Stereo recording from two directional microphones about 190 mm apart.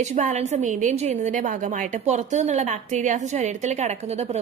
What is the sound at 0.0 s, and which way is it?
A woman's voice, 40° right (ahead or behind).